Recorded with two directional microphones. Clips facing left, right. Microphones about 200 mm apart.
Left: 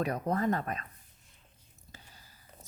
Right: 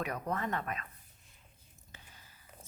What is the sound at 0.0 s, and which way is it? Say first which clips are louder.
Speech: left 6 dB; 35° left (ahead or behind).